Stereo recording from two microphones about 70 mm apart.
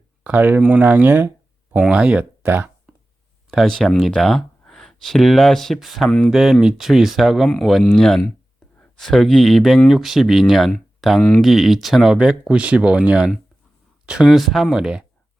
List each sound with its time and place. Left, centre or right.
0.3 s speech: right
2.4 s speech: right
3.8 s speech: centre
11.4 s speech: centre
12.1 s speech: centre